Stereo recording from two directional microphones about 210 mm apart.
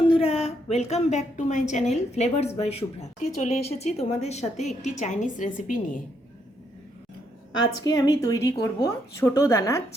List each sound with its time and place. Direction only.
0.1 s a woman's voice: 30° left (ahead or behind)
7.9 s speech: 15° left (ahead or behind)